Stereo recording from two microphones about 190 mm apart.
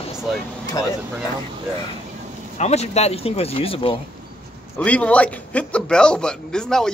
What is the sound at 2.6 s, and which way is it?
Speech, 35° left (ahead or behind).